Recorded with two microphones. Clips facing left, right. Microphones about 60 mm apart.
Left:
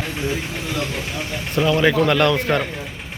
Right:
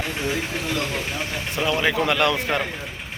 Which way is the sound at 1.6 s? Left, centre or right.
Centre.